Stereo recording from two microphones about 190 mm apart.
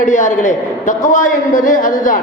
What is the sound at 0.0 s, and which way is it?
A man's voice, 40° left (ahead or behind).